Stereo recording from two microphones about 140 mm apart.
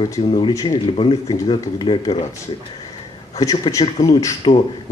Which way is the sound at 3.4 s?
25° left (ahead or behind).